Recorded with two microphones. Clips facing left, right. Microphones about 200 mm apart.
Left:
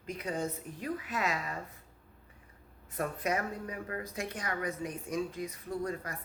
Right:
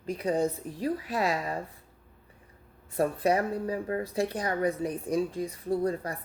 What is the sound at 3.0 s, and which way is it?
Speech, 35° right (ahead or behind).